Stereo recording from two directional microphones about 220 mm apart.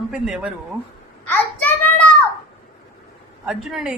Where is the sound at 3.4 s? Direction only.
5° right (ahead or behind).